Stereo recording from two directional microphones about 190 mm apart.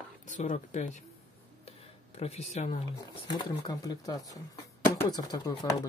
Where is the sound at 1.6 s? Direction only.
35° left (ahead or behind).